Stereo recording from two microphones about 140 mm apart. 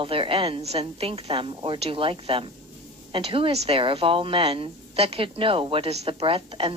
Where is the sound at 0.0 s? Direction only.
40° right (ahead or behind).